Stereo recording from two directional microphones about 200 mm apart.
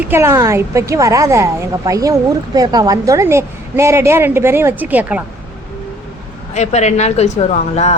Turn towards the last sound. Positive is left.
turn(degrees=35)  # may be behind; listen again after turning